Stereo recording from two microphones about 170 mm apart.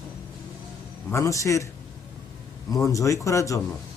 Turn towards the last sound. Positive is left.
turn(degrees=20)  # may be behind; listen again after turning